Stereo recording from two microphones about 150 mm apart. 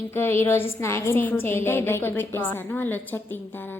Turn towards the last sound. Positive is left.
turn(degrees=15)  # may be behind; listen again after turning